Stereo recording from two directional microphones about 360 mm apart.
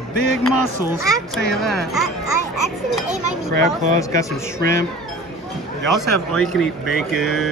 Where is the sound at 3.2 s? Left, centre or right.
Right.